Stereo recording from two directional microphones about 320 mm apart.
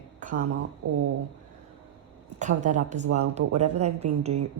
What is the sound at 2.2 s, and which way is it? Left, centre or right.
A woman's voice, right.